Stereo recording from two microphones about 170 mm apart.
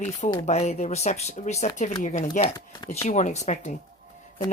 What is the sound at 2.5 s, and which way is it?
Speech, 25° left (ahead or behind).